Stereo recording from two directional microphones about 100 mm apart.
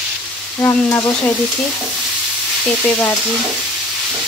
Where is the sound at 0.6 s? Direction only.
25° left (ahead or behind).